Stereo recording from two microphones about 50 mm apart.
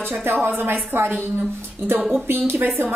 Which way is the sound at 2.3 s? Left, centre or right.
Right.